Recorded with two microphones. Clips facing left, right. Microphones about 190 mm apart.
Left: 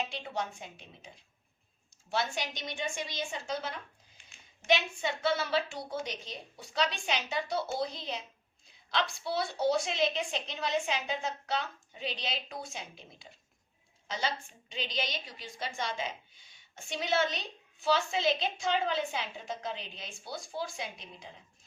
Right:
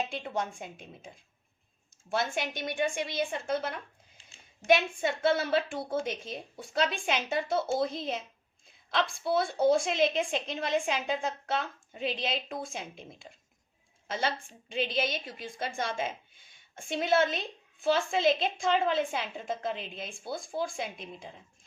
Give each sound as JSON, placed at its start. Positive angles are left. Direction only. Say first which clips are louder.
{"t": 0.1, "sound": "a woman's voice", "louder": "right 3 dB", "side_deg": -50}
{"t": 4.2, "sound": "a sound", "louder": "right 2 dB", "side_deg": -30}
{"t": 4.6, "sound": "a woman's voice", "louder": "right 4 dB", "side_deg": -55}